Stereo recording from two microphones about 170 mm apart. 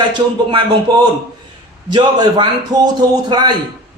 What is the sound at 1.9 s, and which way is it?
A man's voice, 25° right (ahead or behind).